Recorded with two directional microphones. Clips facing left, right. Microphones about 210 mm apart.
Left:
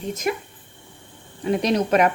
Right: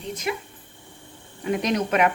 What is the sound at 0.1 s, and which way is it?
Speech, 45° left (ahead or behind).